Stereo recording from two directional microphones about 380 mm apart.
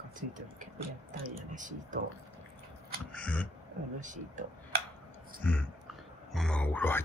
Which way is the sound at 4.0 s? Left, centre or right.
Centre.